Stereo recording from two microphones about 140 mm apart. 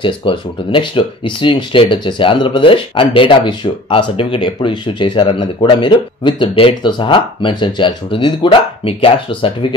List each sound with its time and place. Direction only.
0.0 s speech: 35° left (ahead or behind)